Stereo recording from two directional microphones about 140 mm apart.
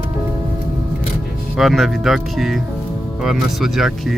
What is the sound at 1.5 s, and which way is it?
Music, centre (ahead or behind).